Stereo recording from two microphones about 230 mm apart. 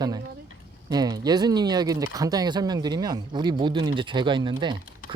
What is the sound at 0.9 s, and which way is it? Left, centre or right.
Speech, centre.